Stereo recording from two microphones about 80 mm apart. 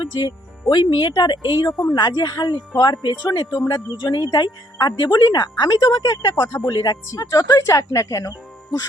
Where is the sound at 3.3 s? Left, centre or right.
Left.